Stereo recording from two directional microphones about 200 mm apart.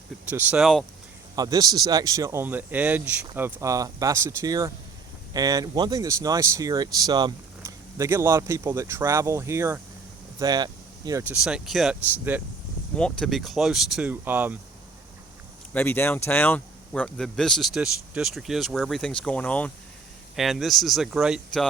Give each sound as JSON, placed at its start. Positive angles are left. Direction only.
{"t": 0.3, "sound": "speech", "side_deg": -5}
{"t": 1.4, "sound": "speech", "side_deg": -20}
{"t": 11.2, "sound": "speech", "side_deg": -5}
{"t": 13.0, "sound": "speech", "side_deg": 5}
{"t": 15.7, "sound": "speech", "side_deg": 10}